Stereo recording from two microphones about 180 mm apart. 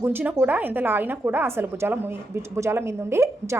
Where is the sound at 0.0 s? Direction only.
10° right (ahead or behind).